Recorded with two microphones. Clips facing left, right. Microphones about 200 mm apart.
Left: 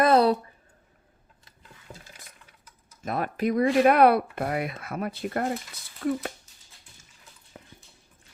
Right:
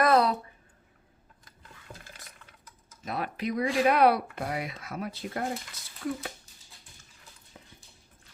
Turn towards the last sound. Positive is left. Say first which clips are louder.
# left 4 dB
turn(degrees=55)  # may be behind; listen again after turning